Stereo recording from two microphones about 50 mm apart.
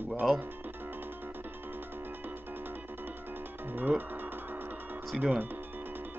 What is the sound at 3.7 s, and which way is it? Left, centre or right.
Speech, right.